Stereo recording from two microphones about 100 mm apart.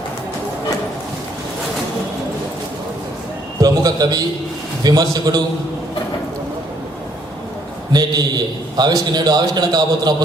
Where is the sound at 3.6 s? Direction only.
40° right (ahead or behind).